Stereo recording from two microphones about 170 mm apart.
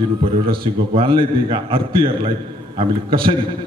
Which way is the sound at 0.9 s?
30° right (ahead or behind).